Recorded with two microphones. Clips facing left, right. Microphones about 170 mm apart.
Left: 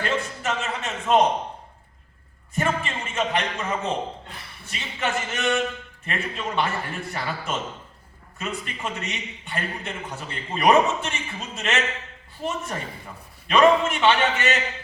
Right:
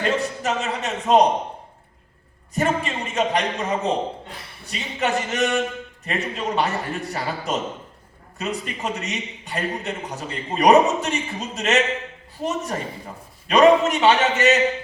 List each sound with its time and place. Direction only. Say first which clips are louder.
0.1 s a man's voice: right 4 dB; 40° right (ahead or behind)
2.6 s a man's voice: right 3 dB; 40° right (ahead or behind)